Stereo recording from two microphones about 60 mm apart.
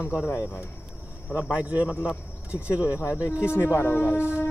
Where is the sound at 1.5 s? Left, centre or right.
Right.